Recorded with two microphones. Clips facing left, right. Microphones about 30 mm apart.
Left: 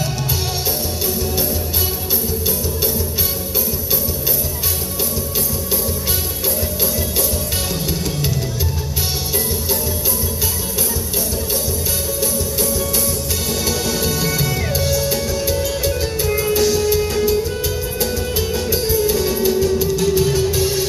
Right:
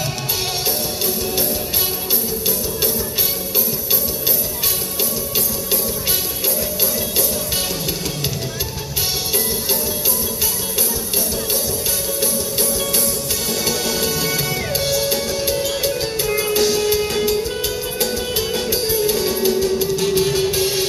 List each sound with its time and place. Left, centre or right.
12.2 s music: right
13.7 s music: centre
20.1 s music: right